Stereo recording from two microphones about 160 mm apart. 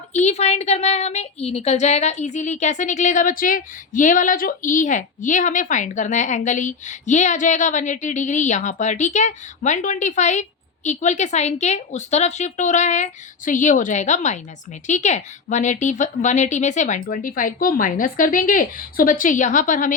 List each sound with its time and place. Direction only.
0.1 s a woman's voice: 45° left (ahead or behind)